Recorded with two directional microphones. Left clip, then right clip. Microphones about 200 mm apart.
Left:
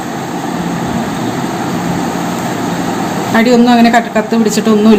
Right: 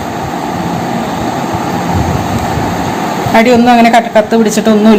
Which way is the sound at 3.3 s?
15° right (ahead or behind).